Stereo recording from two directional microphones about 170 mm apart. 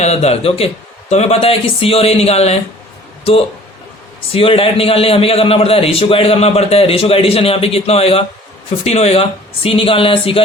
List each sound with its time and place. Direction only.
0.0 s a man's voice: 40° left (ahead or behind)
4.3 s a man's voice: 35° left (ahead or behind)